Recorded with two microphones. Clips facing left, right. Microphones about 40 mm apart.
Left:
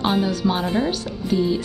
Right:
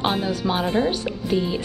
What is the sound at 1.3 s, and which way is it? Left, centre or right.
Speech, right.